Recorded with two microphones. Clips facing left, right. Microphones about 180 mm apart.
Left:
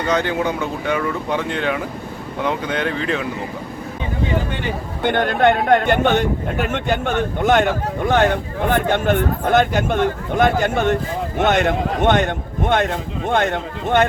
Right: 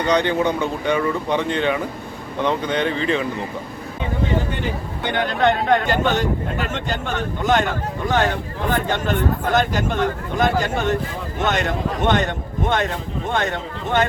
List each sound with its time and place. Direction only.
0.0 s speech: 5° left (ahead or behind)
5.0 s a man's voice: 55° left (ahead or behind)